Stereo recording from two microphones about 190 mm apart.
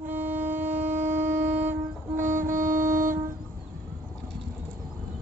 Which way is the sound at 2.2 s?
40° right (ahead or behind).